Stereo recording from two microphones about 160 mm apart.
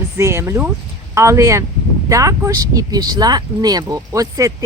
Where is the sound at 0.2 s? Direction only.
15° right (ahead or behind).